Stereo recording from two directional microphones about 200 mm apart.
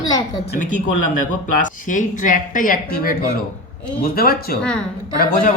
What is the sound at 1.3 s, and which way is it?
Speech, 40° left (ahead or behind).